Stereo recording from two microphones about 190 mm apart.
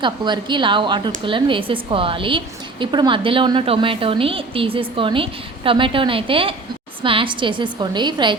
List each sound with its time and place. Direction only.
0.0 s a woman's voice: 25° right (ahead or behind)